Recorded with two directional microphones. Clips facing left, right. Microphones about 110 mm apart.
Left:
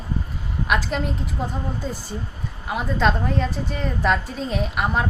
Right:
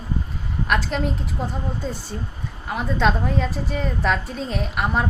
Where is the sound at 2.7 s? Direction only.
Centre (ahead or behind).